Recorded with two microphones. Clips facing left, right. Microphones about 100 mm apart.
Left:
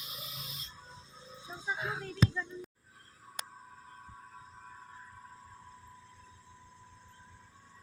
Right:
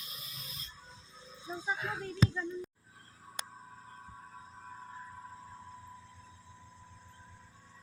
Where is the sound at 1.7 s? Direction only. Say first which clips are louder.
Left 1 dB; 15° left (ahead or behind).